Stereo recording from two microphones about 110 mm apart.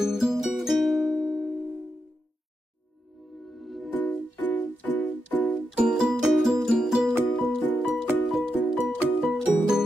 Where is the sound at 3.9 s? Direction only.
15° left (ahead or behind).